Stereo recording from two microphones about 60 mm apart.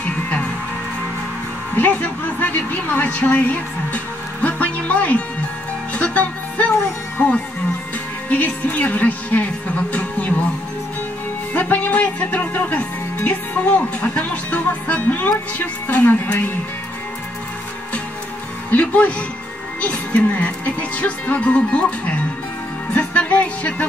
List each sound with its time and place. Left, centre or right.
0.0 s music: left
1.8 s a woman's voice: left
6.0 s music: left
7.2 s speech: left
11.5 s speech: left
18.7 s speech: left
22.9 s music: left